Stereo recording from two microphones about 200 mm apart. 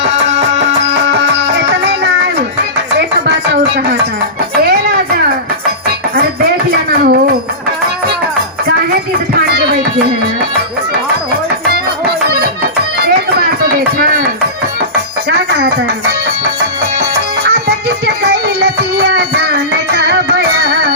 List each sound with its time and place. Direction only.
1.0 s music: 60° right (ahead or behind)
6.7 s a sound: 50° right (ahead or behind)
9.5 s music: 55° right (ahead or behind)
11.7 s music: 50° right (ahead or behind)
17.7 s music: 55° right (ahead or behind)
19.9 s music: 55° right (ahead or behind)